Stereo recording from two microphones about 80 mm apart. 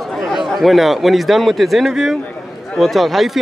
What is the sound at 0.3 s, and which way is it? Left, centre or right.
A man's voice, centre.